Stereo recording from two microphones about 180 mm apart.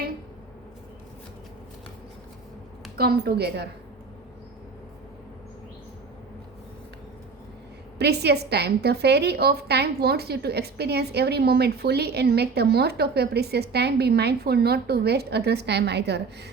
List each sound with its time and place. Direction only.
3.0 s a woman's voice: 60° right (ahead or behind)
7.9 s a woman's voice: 65° right (ahead or behind)